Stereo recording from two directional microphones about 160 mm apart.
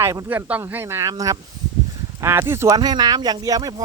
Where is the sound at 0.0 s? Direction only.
15° right (ahead or behind).